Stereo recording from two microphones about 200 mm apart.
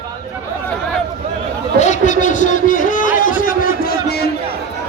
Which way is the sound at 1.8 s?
35° left (ahead or behind).